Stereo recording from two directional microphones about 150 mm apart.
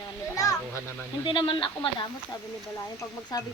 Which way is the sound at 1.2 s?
35° left (ahead or behind).